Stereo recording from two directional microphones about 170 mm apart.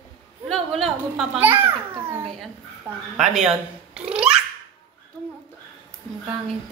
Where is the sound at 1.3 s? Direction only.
15° right (ahead or behind).